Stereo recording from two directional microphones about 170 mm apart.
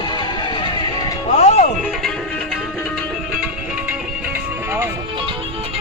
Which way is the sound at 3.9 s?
10° right (ahead or behind).